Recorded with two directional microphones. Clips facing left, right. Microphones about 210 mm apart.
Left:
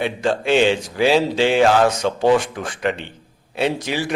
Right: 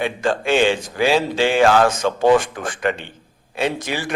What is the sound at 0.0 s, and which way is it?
Speech, 50° right (ahead or behind).